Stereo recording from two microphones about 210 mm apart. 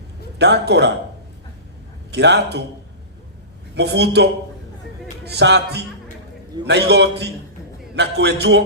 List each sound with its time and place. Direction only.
0.3 s a man's voice: 55° right (ahead or behind)
2.0 s a man's voice: 55° right (ahead or behind)
3.8 s a man's voice: 55° right (ahead or behind)